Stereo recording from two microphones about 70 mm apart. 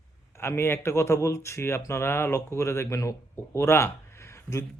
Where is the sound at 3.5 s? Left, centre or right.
Left.